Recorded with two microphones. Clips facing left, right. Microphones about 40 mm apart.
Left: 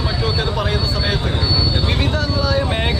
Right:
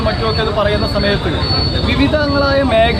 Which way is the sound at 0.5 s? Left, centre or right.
Centre.